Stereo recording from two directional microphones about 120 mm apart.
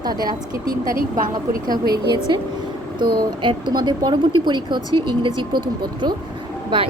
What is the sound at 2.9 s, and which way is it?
A woman's voice, 40° right (ahead or behind).